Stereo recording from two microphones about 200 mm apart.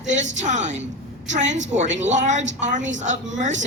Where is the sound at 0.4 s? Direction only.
35° right (ahead or behind).